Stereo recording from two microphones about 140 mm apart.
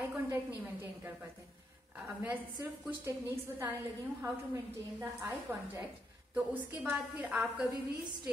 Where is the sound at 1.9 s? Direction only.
10° right (ahead or behind).